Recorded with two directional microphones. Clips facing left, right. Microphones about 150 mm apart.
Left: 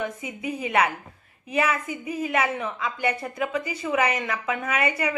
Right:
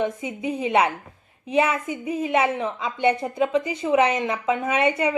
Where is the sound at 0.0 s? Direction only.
25° right (ahead or behind).